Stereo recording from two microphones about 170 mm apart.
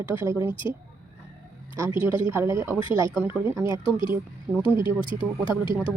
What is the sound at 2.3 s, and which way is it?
A woman's voice, 15° right (ahead or behind).